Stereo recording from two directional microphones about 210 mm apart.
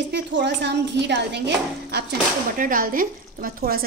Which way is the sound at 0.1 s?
55° right (ahead or behind).